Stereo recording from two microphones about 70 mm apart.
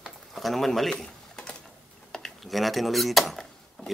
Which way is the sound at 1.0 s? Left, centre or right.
Centre.